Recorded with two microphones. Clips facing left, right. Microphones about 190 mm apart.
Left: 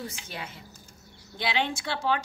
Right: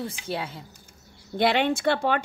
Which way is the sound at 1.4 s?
60° right (ahead or behind).